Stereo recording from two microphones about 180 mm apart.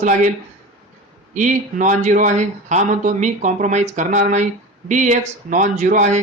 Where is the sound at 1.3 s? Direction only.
45° right (ahead or behind).